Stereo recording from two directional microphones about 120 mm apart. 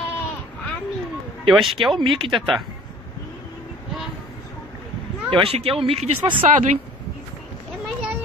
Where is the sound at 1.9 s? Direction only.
45° right (ahead or behind).